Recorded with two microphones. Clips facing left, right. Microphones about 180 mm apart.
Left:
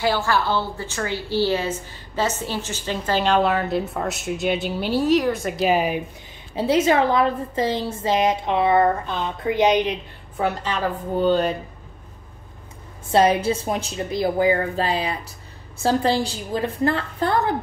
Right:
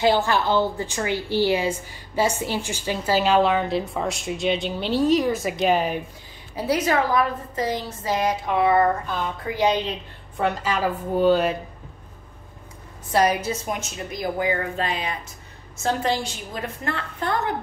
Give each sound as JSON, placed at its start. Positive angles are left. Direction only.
{"t": 0.0, "sound": "a woman's voice", "side_deg": -20}
{"t": 6.5, "sound": "speech", "side_deg": 25}
{"t": 10.6, "sound": "speech", "side_deg": -10}
{"t": 13.1, "sound": "a woman's voice", "side_deg": 25}